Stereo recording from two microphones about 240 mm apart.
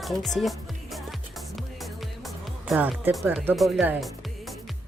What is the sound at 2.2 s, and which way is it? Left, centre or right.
Speech, centre.